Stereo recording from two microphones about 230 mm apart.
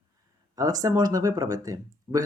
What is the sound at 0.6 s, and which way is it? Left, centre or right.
Speech, centre.